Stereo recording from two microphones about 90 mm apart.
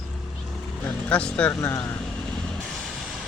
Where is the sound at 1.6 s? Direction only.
35° left (ahead or behind).